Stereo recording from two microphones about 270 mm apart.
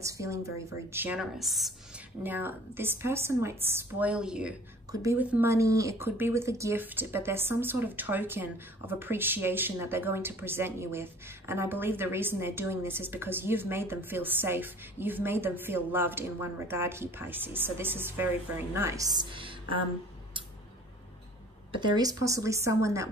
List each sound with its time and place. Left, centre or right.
0.0 s speech: centre
21.7 s speech: centre